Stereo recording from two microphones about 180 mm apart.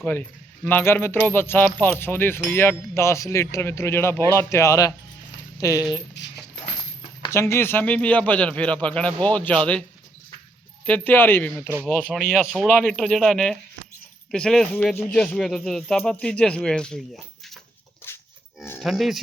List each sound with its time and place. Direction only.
0.0 s speech: 10° left (ahead or behind)
6.2 s speech: 70° left (ahead or behind)
7.2 s speech: 15° left (ahead or behind)
10.8 s speech: 10° left (ahead or behind)
18.0 s music: 10° left (ahead or behind)
18.8 s speech: centre (ahead or behind)